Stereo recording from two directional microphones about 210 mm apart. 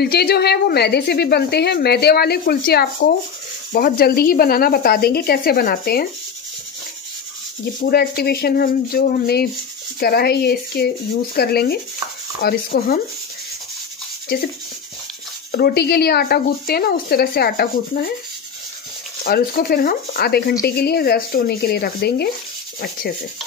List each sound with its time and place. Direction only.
0.0 s a woman's voice: 50° left (ahead or behind)
7.8 s a woman's voice: 45° left (ahead or behind)
15.5 s a woman's voice: 50° left (ahead or behind)
19.2 s a woman's voice: 45° left (ahead or behind)